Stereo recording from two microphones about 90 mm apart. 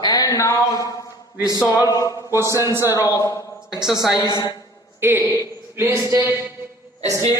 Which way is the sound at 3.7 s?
5° right (ahead or behind).